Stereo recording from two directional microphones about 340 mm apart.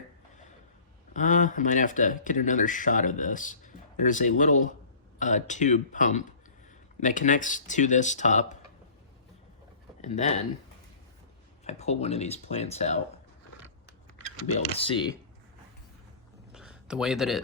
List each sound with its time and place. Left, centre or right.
1.1 s speech: left
10.0 s speech: centre
11.6 s speech: centre
14.6 s speech: centre
16.5 s a sound: centre